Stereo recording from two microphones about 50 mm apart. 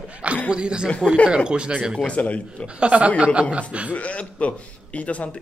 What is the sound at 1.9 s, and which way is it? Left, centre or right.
Speech, left.